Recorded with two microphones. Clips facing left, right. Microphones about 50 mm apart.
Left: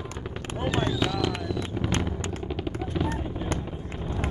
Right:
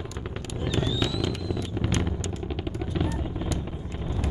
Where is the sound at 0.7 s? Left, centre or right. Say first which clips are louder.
Left 2 dB; left.